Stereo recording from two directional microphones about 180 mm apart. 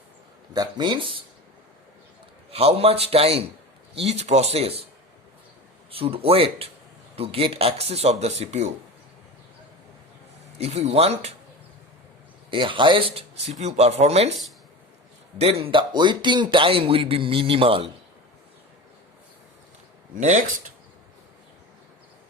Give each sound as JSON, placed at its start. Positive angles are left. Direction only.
{"t": 0.5, "sound": "a man's voice", "side_deg": -25}
{"t": 2.5, "sound": "speech", "side_deg": -35}
{"t": 5.9, "sound": "speech", "side_deg": -30}
{"t": 10.6, "sound": "speech", "side_deg": -35}
{"t": 12.5, "sound": "speech", "side_deg": -30}
{"t": 15.4, "sound": "a man's voice", "side_deg": -35}
{"t": 20.1, "sound": "speech", "side_deg": -45}